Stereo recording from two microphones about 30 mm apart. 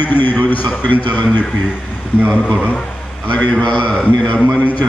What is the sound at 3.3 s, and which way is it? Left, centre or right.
Speech, left.